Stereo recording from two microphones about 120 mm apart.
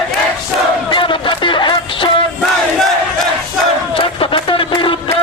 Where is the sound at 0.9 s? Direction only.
45° left (ahead or behind).